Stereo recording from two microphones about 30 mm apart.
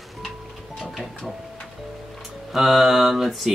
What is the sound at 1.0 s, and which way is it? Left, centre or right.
Speech, centre.